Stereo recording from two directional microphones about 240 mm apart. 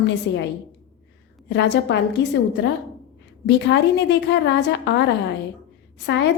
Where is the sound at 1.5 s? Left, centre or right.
Left.